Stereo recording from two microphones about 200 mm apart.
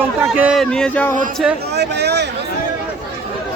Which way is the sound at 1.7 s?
55° right (ahead or behind).